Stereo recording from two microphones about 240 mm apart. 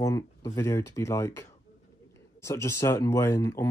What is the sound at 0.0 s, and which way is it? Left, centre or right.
Speech, centre.